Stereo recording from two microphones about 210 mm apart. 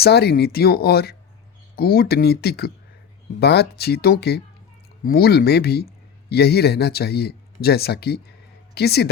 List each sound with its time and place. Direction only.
0.0 s speech: 50° left (ahead or behind)